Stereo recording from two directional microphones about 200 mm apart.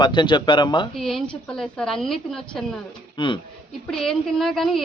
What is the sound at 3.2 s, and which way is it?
Speech, 25° left (ahead or behind).